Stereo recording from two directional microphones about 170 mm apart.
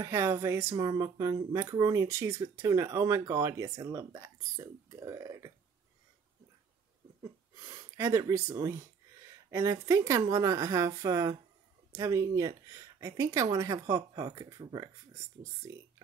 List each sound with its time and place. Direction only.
0.0 s speech: 15° right (ahead or behind)
7.2 s speech: 25° right (ahead or behind)